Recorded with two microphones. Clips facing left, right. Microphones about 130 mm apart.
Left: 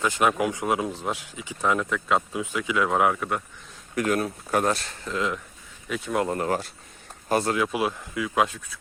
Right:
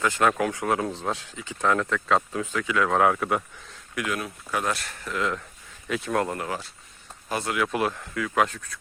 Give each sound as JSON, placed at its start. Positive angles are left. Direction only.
{"t": 0.0, "sound": "speech", "side_deg": 20}
{"t": 3.0, "sound": "speech", "side_deg": 0}
{"t": 3.9, "sound": "speech", "side_deg": 40}
{"t": 5.9, "sound": "speech", "side_deg": 0}
{"t": 6.3, "sound": "speech", "side_deg": 40}
{"t": 7.5, "sound": "speech", "side_deg": 15}